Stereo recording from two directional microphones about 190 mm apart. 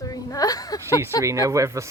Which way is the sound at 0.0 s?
20° left (ahead or behind).